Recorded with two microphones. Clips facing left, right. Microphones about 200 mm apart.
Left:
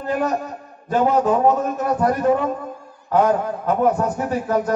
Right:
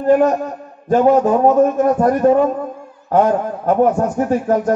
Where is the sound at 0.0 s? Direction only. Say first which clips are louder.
Right 9 dB; 45° right (ahead or behind).